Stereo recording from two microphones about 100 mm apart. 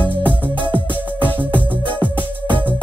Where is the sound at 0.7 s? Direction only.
20° right (ahead or behind).